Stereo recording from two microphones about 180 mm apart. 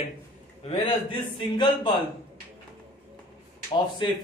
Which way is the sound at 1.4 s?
25° left (ahead or behind).